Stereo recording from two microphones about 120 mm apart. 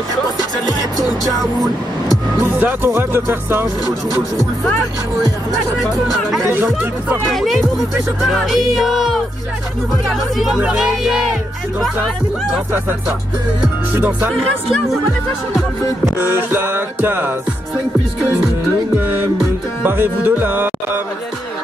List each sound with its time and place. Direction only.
2.4 s speech: 15° right (ahead or behind)
6.4 s speech: 20° right (ahead or behind)
7.3 s speech: centre (ahead or behind)
13.9 s speech: 15° right (ahead or behind)
16.2 s speech: 15° right (ahead or behind)
18.9 s speech: 15° right (ahead or behind)